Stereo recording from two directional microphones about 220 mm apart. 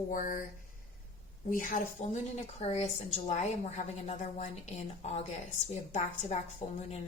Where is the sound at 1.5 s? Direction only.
40° left (ahead or behind).